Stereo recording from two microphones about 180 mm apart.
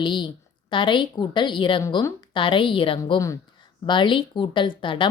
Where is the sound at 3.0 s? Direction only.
20° left (ahead or behind).